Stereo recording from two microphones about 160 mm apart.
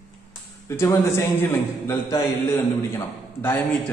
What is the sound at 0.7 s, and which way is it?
A man's voice, 15° left (ahead or behind).